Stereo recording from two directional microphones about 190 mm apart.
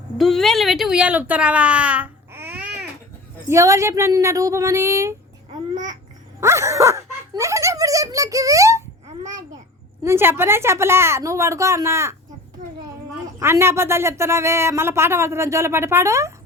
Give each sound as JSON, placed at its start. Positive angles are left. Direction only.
{"t": 0.2, "sound": "speech", "side_deg": 0}
{"t": 6.4, "sound": "speech", "side_deg": -15}
{"t": 10.0, "sound": "speech", "side_deg": -10}
{"t": 13.4, "sound": "speech", "side_deg": -10}